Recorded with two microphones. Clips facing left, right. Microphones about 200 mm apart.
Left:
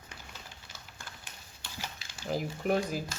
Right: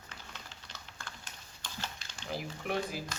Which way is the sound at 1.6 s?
10° left (ahead or behind).